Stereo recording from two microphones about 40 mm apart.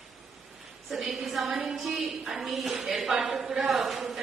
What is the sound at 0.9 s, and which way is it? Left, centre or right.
A woman's voice, centre.